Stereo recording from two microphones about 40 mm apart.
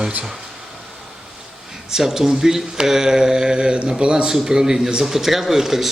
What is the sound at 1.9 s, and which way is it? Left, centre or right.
Speech, centre.